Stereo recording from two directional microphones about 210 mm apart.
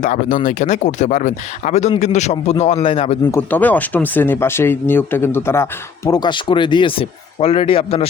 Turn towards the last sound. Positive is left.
turn(degrees=25)  # may be behind; listen again after turning